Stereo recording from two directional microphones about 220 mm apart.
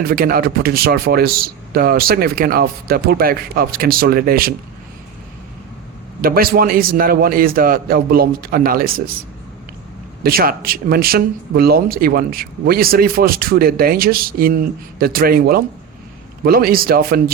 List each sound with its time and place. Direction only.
0.0 s speech: 45° right (ahead or behind)
6.2 s speech: 40° right (ahead or behind)
10.2 s speech: 40° right (ahead or behind)